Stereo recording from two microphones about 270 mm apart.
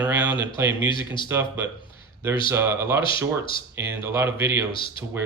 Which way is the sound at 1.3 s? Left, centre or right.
Centre.